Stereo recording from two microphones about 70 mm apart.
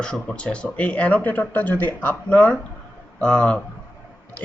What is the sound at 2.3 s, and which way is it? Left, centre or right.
Speech, centre.